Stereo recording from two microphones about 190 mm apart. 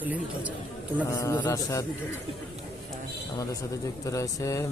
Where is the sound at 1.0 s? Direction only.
15° left (ahead or behind).